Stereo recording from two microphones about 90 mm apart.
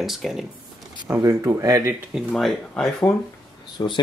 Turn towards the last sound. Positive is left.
turn(degrees=60)  # may be behind; listen again after turning